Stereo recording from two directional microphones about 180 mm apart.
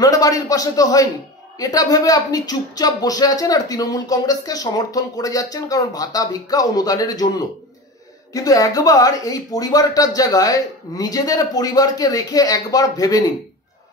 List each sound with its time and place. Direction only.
0.0 s speech: 20° left (ahead or behind)